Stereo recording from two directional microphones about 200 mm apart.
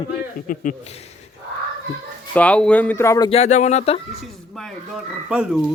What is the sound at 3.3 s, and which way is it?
Speech, 35° left (ahead or behind).